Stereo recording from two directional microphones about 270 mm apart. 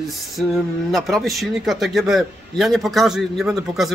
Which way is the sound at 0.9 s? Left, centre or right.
Centre.